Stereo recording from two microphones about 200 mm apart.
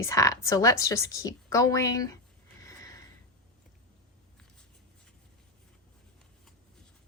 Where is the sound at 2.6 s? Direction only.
15° left (ahead or behind).